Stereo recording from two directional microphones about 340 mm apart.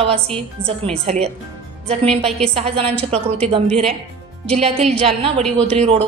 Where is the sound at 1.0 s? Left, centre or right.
Centre.